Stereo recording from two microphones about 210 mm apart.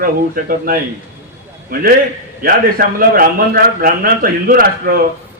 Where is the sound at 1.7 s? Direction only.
45° right (ahead or behind).